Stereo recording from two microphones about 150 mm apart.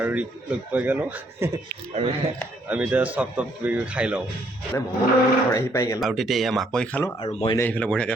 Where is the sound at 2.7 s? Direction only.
10° right (ahead or behind).